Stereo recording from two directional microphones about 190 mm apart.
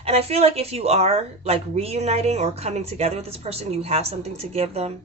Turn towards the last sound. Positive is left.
turn(degrees=-35)  # may be behind; listen again after turning